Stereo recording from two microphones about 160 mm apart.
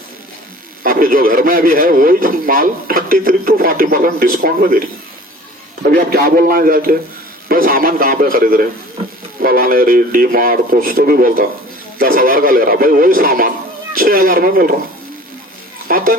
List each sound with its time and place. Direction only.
0.8 s a man's voice: 65° right (ahead or behind)
5.8 s a man's voice: 60° right (ahead or behind)
15.9 s speech: 60° right (ahead or behind)